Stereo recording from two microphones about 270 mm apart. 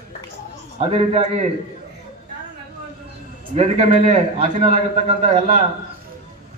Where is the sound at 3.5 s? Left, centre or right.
Right.